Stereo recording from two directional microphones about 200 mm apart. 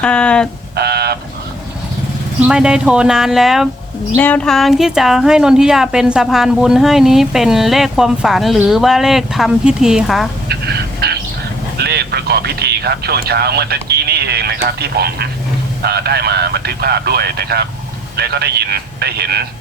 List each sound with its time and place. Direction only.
0.0 s speech: 5° left (ahead or behind)
0.8 s a sound: 55° right (ahead or behind)
2.5 s speech: 5° right (ahead or behind)
4.1 s speech: 10° left (ahead or behind)
11.0 s bird: 50° right (ahead or behind)
11.8 s speech: 55° right (ahead or behind)